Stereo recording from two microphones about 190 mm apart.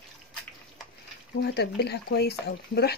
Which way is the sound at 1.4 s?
60° left (ahead or behind).